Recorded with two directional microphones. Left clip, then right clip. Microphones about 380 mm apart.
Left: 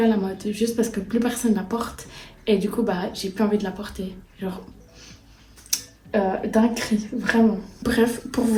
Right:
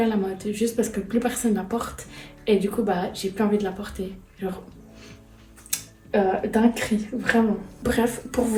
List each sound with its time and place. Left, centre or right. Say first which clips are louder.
0.0 s speech: left 2 dB; centre
5.7 s speech: even; centre